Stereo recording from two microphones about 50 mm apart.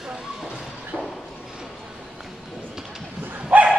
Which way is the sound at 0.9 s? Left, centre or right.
Centre.